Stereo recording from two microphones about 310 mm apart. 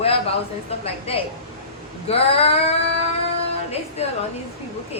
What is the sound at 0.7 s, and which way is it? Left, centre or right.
A woman's voice, centre.